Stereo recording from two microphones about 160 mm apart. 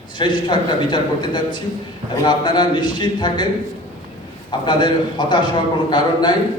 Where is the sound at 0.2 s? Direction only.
30° left (ahead or behind).